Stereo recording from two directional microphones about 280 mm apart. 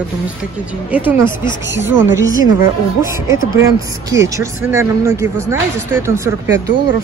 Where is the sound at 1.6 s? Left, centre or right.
Right.